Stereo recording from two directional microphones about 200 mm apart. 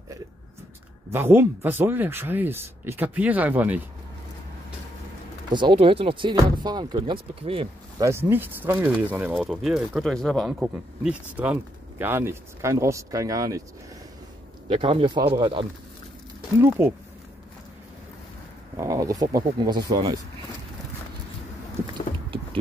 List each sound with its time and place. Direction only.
1.1 s speech: 10° right (ahead or behind)
5.5 s speech: 25° right (ahead or behind)
8.0 s speech: 10° right (ahead or behind)
14.7 s speech: 25° right (ahead or behind)
16.6 s speech: 10° right (ahead or behind)
18.8 s speech: 15° right (ahead or behind)